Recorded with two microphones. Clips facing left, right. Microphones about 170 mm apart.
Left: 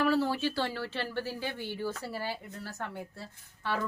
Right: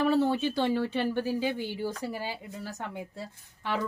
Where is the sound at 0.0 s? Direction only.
20° right (ahead or behind).